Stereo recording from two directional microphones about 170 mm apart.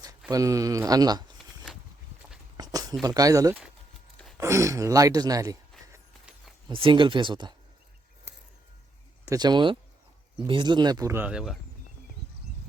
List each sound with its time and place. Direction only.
0.3 s speech: 20° right (ahead or behind)
2.6 s a sound: 25° right (ahead or behind)
3.0 s speech: 20° right (ahead or behind)
6.7 s speech: 30° right (ahead or behind)
9.2 s speech: 20° right (ahead or behind); by 11.5 s 5° right (ahead or behind)